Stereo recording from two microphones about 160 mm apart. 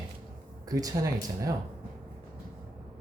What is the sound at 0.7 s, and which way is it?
Speech, 20° right (ahead or behind).